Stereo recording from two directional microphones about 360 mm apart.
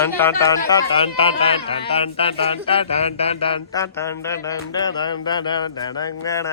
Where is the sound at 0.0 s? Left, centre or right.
Centre.